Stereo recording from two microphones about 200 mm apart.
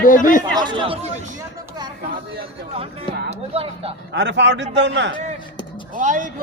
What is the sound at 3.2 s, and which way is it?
Speech, 30° right (ahead or behind).